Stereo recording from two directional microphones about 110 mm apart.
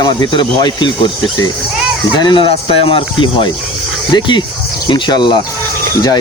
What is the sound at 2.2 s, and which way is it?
Speech, 45° left (ahead or behind).